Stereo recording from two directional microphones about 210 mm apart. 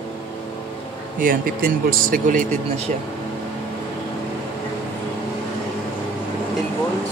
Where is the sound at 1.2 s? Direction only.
45° right (ahead or behind).